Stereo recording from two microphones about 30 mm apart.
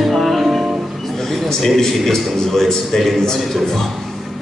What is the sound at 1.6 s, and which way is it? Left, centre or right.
A man's voice, centre.